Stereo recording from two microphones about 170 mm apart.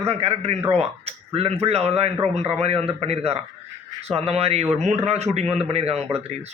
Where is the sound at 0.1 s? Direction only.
35° right (ahead or behind).